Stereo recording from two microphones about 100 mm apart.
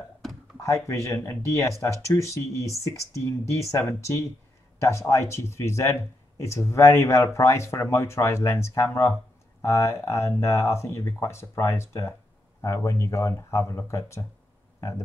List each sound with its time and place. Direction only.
0.6 s speech: 30° left (ahead or behind)